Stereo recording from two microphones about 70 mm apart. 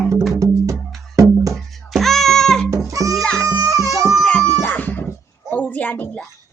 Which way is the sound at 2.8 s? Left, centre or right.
Right.